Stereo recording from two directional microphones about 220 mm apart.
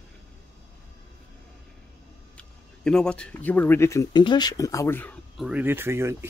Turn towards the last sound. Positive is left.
turn(degrees=-10)  # may be behind; listen again after turning